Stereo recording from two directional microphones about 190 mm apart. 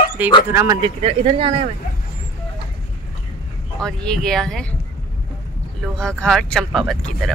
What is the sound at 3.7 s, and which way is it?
Speech, 5° left (ahead or behind).